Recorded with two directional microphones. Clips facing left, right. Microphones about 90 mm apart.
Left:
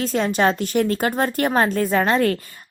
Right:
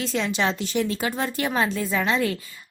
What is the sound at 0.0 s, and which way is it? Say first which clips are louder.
A woman's voice: left 5 dB; 45° left (ahead or behind).